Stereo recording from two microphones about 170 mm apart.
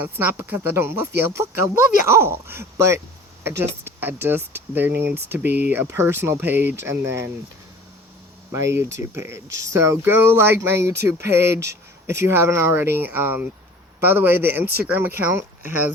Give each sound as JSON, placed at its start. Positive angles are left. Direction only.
{"t": 0.0, "sound": "speech", "side_deg": -15}
{"t": 5.5, "sound": "speech", "side_deg": -75}
{"t": 5.7, "sound": "speech", "side_deg": -10}
{"t": 8.5, "sound": "speech", "side_deg": -20}
{"t": 9.5, "sound": "speech", "side_deg": -90}
{"t": 9.7, "sound": "speech", "side_deg": -15}